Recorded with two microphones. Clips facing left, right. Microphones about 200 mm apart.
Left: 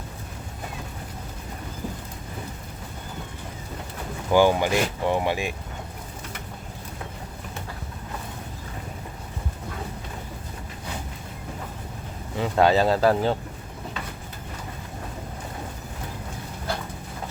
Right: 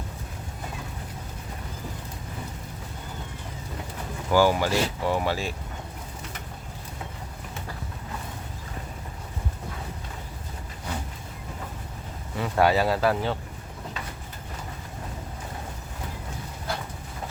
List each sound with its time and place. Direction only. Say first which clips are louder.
4.3 s speech: left 2 dB; 20° left (ahead or behind)
12.4 s speech: left 2 dB; 25° left (ahead or behind)